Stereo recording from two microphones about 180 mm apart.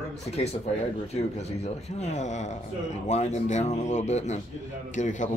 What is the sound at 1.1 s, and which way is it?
Speech, 35° left (ahead or behind).